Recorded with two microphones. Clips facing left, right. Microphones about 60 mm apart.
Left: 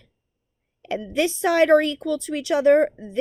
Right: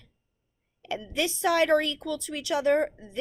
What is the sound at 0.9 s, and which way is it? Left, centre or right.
Speech, left.